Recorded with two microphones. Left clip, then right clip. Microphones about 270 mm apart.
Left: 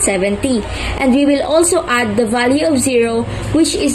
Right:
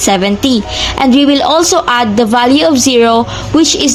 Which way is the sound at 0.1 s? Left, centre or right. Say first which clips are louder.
Right 5 dB; right.